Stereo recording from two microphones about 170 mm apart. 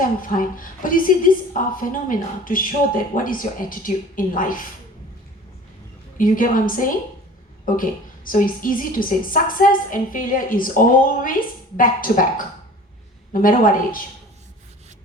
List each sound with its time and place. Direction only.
0.0 s a woman's voice: 55° left (ahead or behind)
6.1 s a woman's voice: 50° left (ahead or behind)